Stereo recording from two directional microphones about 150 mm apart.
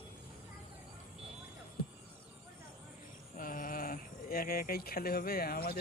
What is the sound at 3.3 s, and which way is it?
Speech, 65° left (ahead or behind).